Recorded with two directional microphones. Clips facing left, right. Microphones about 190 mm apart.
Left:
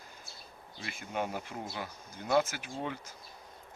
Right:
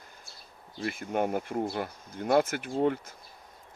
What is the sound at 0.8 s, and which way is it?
Speech, 50° right (ahead or behind).